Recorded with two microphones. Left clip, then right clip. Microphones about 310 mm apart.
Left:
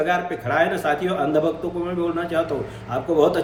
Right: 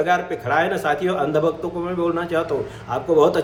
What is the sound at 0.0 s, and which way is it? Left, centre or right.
A man's voice, centre.